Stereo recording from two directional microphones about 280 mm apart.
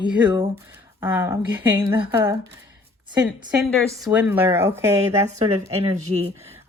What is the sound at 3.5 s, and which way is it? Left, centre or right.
Speech, centre.